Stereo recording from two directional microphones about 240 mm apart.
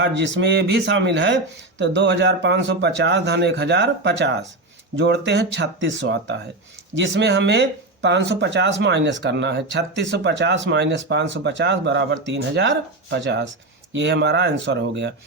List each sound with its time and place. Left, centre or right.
0.0 s speech: right